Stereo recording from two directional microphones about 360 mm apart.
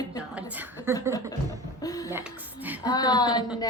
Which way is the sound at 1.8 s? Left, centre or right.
Centre.